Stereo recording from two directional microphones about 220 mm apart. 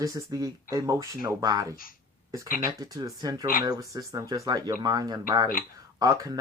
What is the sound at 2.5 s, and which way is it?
Speech, 40° left (ahead or behind).